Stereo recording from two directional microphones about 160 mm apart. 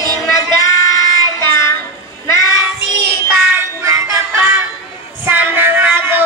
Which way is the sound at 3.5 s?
20° right (ahead or behind).